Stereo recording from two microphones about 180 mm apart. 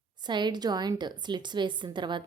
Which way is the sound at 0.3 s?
25° right (ahead or behind).